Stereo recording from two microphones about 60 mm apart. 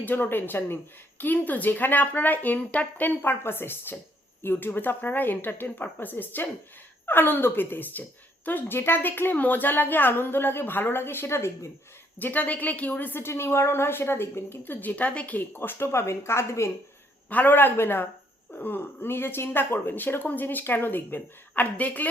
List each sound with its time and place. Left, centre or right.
0.0 s a woman's voice: left
12.2 s a woman's voice: left
15.5 s speech: left
17.2 s a woman's voice: left